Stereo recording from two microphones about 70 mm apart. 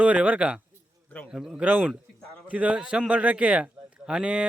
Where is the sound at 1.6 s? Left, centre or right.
Right.